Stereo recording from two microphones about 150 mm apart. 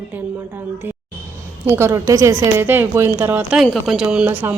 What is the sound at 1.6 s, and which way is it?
A woman's voice, 15° right (ahead or behind).